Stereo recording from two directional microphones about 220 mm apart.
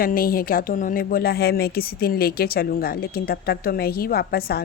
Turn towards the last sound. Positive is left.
turn(degrees=45)  # may be behind; listen again after turning